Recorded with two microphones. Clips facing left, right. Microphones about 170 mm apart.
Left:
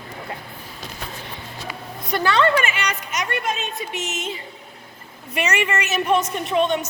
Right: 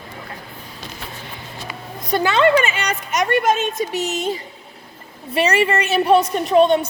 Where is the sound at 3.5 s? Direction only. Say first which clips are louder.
Right 8 dB; 40° right (ahead or behind).